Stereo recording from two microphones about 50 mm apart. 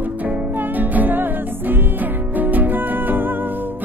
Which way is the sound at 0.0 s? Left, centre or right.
Right.